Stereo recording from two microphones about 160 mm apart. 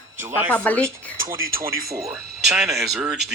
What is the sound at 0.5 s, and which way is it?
Speech, 10° left (ahead or behind).